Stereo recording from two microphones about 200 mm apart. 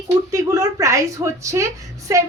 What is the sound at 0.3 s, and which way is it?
A woman's voice, 15° right (ahead or behind).